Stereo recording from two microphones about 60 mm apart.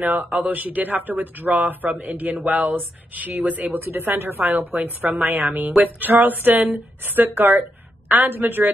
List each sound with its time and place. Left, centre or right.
0.0 s speech: right
4.4 s speech: right